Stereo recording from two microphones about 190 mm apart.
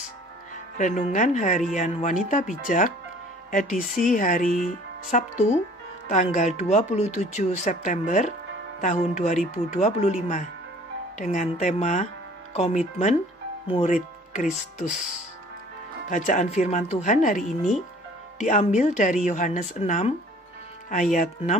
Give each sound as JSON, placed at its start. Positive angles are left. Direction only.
{"t": 0.7, "sound": "speech", "side_deg": 40}
{"t": 4.0, "sound": "speech", "side_deg": 45}
{"t": 16.1, "sound": "speech", "side_deg": 40}